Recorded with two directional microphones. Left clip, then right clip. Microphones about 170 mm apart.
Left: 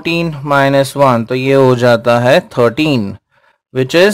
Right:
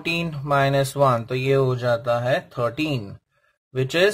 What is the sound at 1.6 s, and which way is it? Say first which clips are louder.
Speech: left 13 dB; 40° left (ahead or behind).